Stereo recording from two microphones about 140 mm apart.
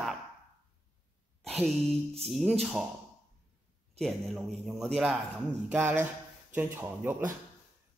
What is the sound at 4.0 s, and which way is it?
A man's voice, centre (ahead or behind).